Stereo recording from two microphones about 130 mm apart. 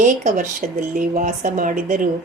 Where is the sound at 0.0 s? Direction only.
90° right.